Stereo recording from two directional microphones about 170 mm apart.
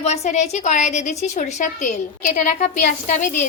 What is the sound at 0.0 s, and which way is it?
A woman's voice, 40° left (ahead or behind).